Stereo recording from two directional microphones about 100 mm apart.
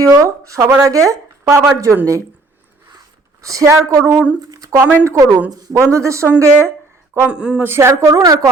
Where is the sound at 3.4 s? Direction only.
35° right (ahead or behind).